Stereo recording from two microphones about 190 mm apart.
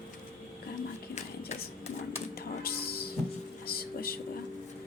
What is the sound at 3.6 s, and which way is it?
Vehicle, 50° left (ahead or behind).